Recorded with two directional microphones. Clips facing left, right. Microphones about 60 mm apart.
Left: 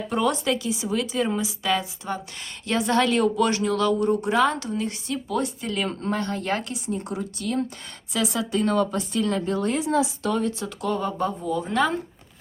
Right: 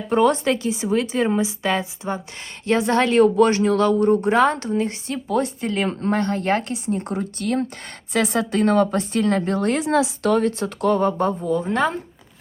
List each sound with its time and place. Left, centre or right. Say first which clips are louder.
0.1 s a woman's voice: right 6 dB; right